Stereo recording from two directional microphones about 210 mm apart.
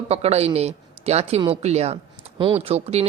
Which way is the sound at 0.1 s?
30° right (ahead or behind).